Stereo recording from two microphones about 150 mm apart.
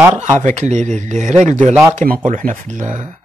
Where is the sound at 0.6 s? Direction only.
55° right (ahead or behind).